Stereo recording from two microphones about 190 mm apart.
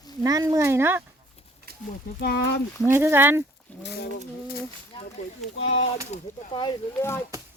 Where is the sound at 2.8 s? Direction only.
15° right (ahead or behind).